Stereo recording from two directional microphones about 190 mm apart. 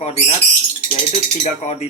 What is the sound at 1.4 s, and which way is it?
Speech, 40° left (ahead or behind).